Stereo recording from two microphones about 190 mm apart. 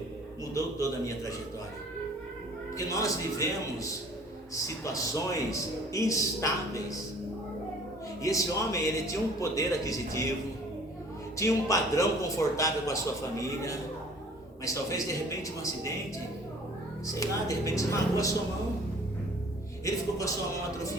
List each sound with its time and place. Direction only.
0.5 s speech: 15° left (ahead or behind)
2.7 s speech: 15° left (ahead or behind)
4.5 s speech: 15° left (ahead or behind)
8.2 s speech: 15° left (ahead or behind)
11.3 s speech: 15° left (ahead or behind)
17.1 s speech: 15° left (ahead or behind)
19.8 s speech: 15° left (ahead or behind)